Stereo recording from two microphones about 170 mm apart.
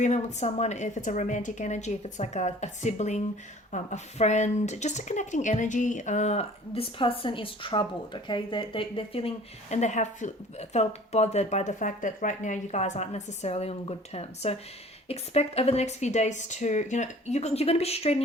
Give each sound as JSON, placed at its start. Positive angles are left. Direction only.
{"t": 0.0, "sound": "speech", "side_deg": 45}